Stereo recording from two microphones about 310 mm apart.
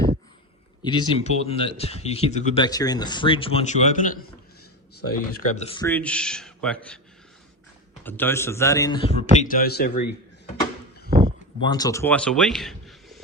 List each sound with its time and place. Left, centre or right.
0.9 s speech: centre
8.0 s a man's voice: centre; by 10.1 s left
11.6 s a man's voice: centre